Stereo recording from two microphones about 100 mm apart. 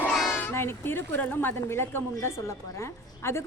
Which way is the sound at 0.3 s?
20° left (ahead or behind).